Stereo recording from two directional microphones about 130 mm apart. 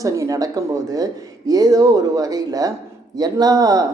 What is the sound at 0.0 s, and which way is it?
Speech, 25° right (ahead or behind).